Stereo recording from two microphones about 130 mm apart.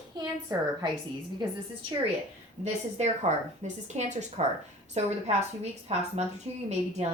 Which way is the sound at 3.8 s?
60° right (ahead or behind).